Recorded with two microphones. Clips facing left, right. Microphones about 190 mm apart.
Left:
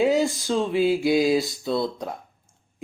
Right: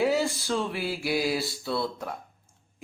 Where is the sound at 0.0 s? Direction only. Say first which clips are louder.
Left 4 dB; 15° left (ahead or behind).